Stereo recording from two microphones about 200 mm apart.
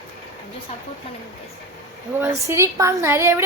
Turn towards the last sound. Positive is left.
turn(degrees=-15)  # may be behind; listen again after turning